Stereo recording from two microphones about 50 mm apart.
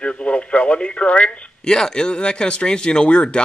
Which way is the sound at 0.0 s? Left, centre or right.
Left.